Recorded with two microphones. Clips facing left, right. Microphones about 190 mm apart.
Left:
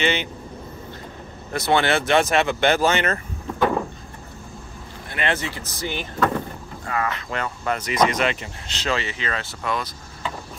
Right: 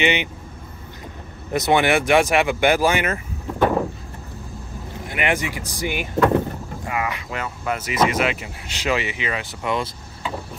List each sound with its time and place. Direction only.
0.0 s speech: 15° right (ahead or behind)
1.5 s speech: 15° right (ahead or behind)
5.1 s speech: 15° right (ahead or behind)